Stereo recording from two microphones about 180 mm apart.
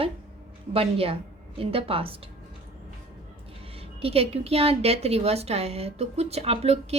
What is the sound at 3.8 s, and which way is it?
Speech, 35° right (ahead or behind).